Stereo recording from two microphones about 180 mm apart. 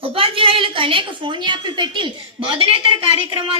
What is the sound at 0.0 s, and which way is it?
A woman's voice, 30° right (ahead or behind).